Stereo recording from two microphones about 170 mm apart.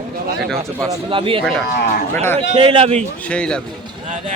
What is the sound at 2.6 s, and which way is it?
Speech, 30° right (ahead or behind).